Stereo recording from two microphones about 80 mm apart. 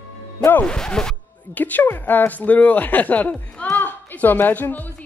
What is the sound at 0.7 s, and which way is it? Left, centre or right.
Speech, centre.